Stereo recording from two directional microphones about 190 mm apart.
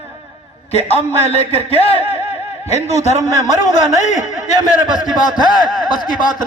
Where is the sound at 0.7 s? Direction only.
35° left (ahead or behind).